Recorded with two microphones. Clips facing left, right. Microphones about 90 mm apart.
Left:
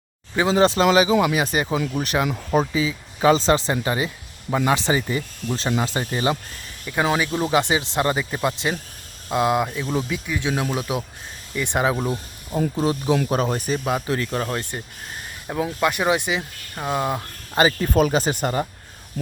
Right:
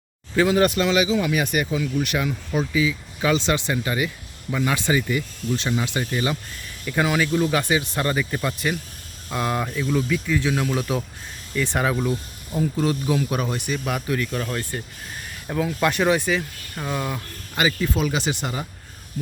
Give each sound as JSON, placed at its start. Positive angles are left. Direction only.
{"t": 0.3, "sound": "speech", "side_deg": 25}
{"t": 0.9, "sound": "speech", "side_deg": 45}
{"t": 1.3, "sound": "speech", "side_deg": 30}
{"t": 6.8, "sound": "speech", "side_deg": 15}
{"t": 7.3, "sound": "speech", "side_deg": 30}
{"t": 9.8, "sound": "speech", "side_deg": 30}
{"t": 10.2, "sound": "speech", "side_deg": 15}
{"t": 13.2, "sound": "speech", "side_deg": 35}
{"t": 13.8, "sound": "speech", "side_deg": 25}
{"t": 15.4, "sound": "speech", "side_deg": 20}
{"t": 15.8, "sound": "speech", "side_deg": 10}
{"t": 17.8, "sound": "speech", "side_deg": 45}